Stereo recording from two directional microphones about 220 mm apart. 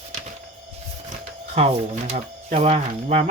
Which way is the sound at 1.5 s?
25° right (ahead or behind).